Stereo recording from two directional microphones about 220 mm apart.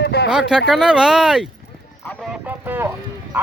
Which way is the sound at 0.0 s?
45° left (ahead or behind).